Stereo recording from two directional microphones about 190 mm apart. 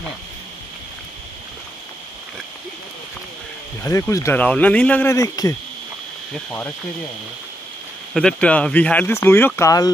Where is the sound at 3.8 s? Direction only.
15° left (ahead or behind).